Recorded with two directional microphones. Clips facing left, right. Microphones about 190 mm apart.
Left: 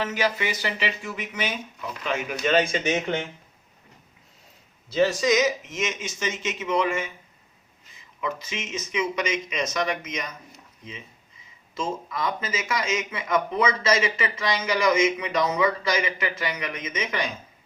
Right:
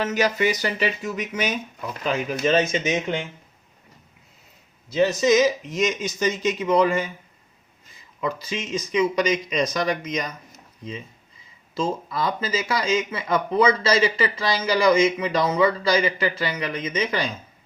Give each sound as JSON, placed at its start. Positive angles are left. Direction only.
{"t": 0.0, "sound": "a man's voice", "side_deg": -45}
{"t": 4.9, "sound": "a man's voice", "side_deg": -20}